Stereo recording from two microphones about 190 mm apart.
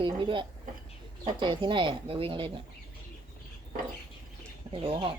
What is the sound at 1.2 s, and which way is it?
Speech, 25° right (ahead or behind).